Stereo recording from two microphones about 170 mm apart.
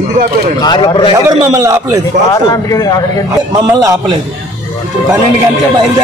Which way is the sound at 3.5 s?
20° right (ahead or behind).